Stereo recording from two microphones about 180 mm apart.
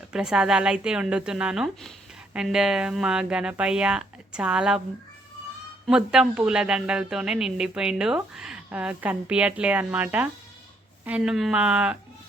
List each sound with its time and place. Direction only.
0.1 s a woman's voice: 5° right (ahead or behind)
5.9 s a woman's voice: 5° right (ahead or behind)